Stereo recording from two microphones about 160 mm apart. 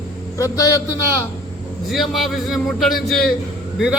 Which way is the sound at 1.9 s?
Centre (ahead or behind).